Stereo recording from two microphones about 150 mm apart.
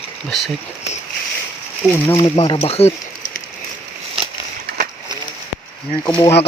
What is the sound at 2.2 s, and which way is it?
Speech, 35° left (ahead or behind).